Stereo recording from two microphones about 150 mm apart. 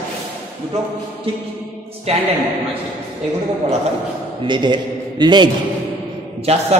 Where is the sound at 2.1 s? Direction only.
40° right (ahead or behind).